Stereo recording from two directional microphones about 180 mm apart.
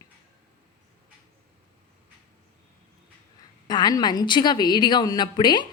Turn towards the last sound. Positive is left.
turn(degrees=25)  # may be behind; listen again after turning